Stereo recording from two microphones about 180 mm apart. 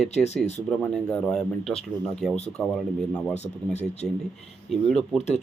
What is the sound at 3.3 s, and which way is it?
Speech, 40° left (ahead or behind).